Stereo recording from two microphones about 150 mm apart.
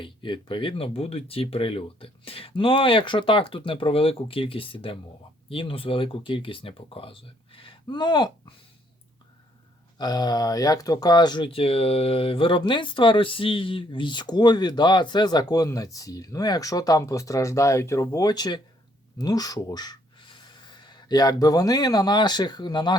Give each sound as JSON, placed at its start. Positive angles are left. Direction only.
{"t": 0.0, "sound": "speech", "side_deg": 35}
{"t": 10.0, "sound": "speech", "side_deg": 25}